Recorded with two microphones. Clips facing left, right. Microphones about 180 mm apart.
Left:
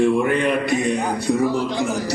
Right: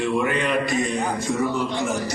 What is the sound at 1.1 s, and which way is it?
Speech, 35° left (ahead or behind).